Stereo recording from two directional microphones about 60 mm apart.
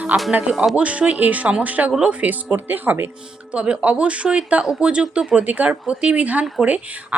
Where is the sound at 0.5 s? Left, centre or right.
Centre.